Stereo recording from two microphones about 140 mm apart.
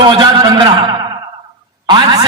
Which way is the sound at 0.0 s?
35° right (ahead or behind).